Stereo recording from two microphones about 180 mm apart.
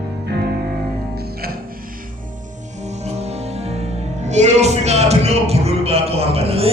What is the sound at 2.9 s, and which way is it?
Music, 35° right (ahead or behind).